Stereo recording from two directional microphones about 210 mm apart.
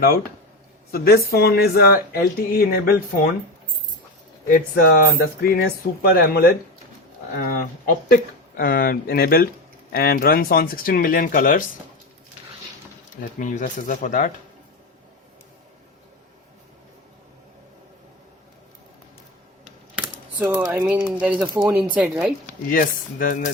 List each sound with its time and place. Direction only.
0.0 s speech: 45° left (ahead or behind)
4.4 s speech: 40° left (ahead or behind)
13.4 s speech: 40° left (ahead or behind)
19.6 s typing: 10° right (ahead or behind)
21.7 s speech: 5° right (ahead or behind)
22.7 s speech: 40° left (ahead or behind)